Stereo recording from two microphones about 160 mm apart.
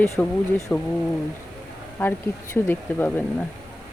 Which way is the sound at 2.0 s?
15° left (ahead or behind).